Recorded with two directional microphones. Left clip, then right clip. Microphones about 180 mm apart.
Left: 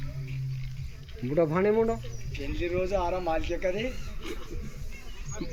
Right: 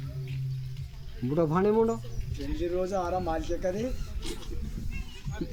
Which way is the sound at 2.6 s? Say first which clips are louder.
Left 1 dB; 85° right.